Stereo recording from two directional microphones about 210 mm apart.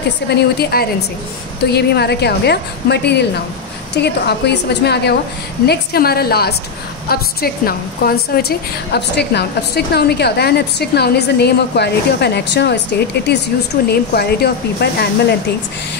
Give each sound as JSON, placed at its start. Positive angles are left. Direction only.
{"t": 0.3, "sound": "a woman's voice", "side_deg": 45}
{"t": 13.8, "sound": "a woman's voice", "side_deg": 50}